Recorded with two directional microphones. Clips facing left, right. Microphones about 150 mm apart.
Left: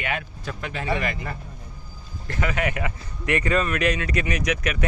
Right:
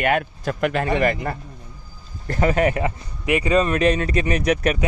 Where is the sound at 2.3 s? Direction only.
35° right (ahead or behind).